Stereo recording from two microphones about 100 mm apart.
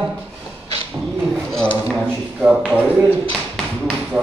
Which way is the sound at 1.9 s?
10° right (ahead or behind).